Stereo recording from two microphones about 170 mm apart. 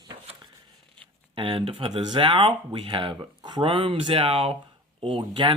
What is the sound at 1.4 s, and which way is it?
Speech, 30° right (ahead or behind).